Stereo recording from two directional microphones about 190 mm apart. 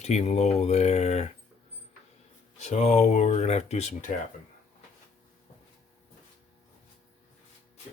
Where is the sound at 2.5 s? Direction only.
35° left (ahead or behind).